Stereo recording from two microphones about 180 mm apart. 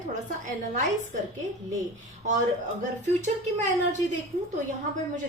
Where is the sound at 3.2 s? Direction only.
40° right (ahead or behind).